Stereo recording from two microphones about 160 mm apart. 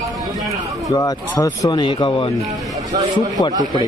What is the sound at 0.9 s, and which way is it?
Speech, 20° left (ahead or behind).